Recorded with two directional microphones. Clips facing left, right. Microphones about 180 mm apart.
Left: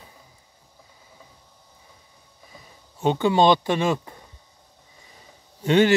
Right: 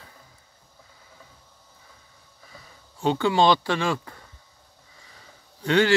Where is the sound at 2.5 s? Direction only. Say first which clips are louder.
Even; 20° left (ahead or behind).